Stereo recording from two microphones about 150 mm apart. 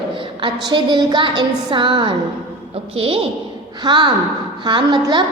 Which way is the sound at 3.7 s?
30° right (ahead or behind).